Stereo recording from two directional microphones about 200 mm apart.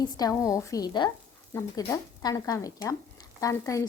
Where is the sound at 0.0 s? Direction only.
20° left (ahead or behind).